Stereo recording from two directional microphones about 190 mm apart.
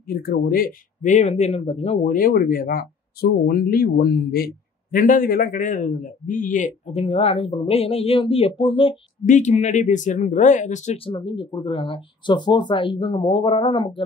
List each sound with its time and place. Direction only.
0.0 s a man's voice: 50° left (ahead or behind); by 8.9 s 30° left (ahead or behind)
9.2 s a man's voice: 40° left (ahead or behind)
11.1 s speech: 25° left (ahead or behind)